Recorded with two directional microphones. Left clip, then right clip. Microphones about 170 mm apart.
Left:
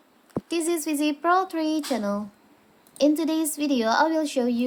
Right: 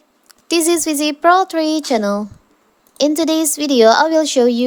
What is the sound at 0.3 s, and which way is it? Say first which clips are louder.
A woman's voice: right 10 dB; 55° right (ahead or behind).